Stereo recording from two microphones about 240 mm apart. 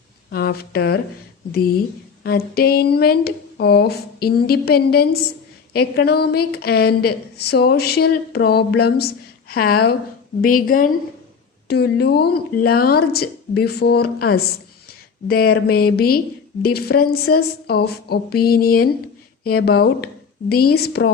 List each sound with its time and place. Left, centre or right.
0.3 s a woman's voice: left
2.6 s a woman's voice: left